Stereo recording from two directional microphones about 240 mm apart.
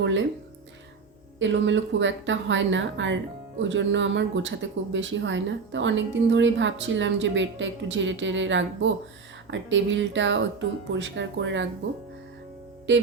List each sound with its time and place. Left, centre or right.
0.0 s speech: right
1.4 s speech: right
12.9 s speech: right